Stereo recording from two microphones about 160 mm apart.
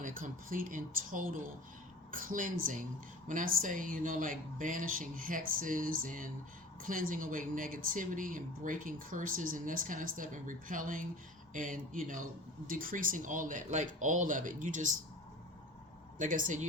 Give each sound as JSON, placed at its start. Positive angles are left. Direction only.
{"t": 0.0, "sound": "speech", "side_deg": -60}
{"t": 16.1, "sound": "speech", "side_deg": -55}